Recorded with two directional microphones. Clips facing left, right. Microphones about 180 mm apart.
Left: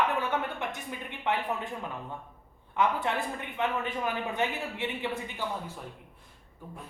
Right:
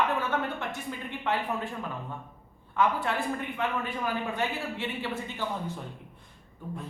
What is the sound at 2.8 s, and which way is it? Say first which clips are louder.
Speech: right 1 dB; 20° left (ahead or behind).